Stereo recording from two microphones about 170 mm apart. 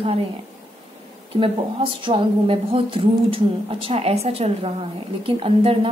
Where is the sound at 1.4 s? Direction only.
30° right (ahead or behind).